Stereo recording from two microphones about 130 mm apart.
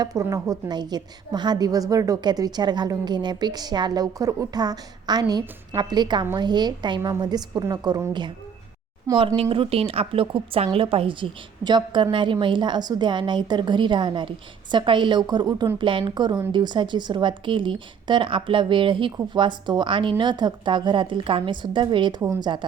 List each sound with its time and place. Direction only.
0.0 s a woman's voice: 25° right (ahead or behind)
9.1 s a woman's voice: 45° right (ahead or behind)